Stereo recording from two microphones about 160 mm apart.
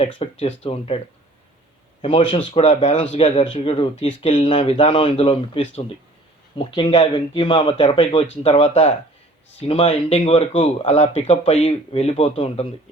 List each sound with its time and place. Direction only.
0.2 s speech: 40° left (ahead or behind)
2.0 s speech: 35° left (ahead or behind)